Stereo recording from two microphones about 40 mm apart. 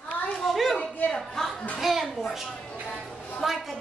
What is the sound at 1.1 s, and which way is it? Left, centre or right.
Speech, centre.